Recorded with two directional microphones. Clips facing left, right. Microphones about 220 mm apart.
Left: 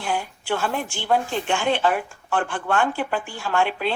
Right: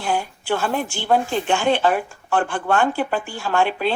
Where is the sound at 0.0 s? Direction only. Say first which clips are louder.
Right 3 dB; 40° right (ahead or behind).